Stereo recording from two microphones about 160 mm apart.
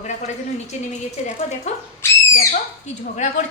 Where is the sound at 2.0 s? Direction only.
15° left (ahead or behind).